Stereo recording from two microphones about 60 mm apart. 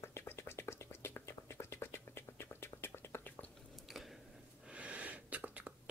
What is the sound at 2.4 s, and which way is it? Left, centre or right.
Whispering, left.